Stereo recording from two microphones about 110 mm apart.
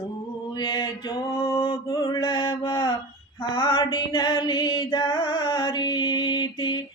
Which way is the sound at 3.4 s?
50° left (ahead or behind).